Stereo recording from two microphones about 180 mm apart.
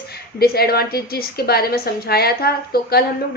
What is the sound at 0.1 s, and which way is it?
A woman's voice, 60° left (ahead or behind).